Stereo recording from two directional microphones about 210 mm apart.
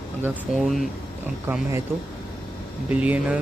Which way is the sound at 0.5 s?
Centre (ahead or behind).